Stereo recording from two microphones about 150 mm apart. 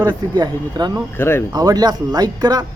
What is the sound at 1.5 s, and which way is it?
Speech, 25° right (ahead or behind).